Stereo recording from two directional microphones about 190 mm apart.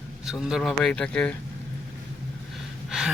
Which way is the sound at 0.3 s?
Centre (ahead or behind).